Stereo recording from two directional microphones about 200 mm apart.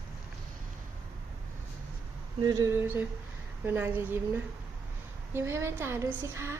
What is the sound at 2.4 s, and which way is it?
A woman's voice, 20° right (ahead or behind).